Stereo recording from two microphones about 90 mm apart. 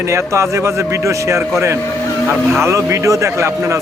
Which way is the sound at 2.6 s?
30° right (ahead or behind).